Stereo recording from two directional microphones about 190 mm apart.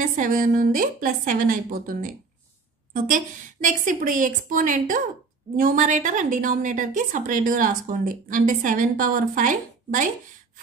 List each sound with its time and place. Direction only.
0.0 s a woman's voice: 45° right (ahead or behind)
3.6 s a woman's voice: 45° right (ahead or behind)